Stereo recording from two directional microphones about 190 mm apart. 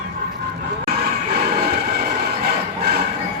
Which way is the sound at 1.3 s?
55° right (ahead or behind).